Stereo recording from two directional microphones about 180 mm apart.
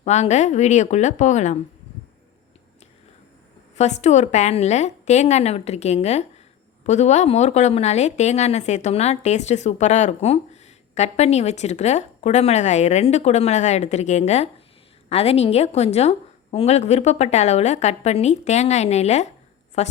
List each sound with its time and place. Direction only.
0.0 s a woman's voice: 40° left (ahead or behind)
3.8 s a woman's voice: 40° left (ahead or behind)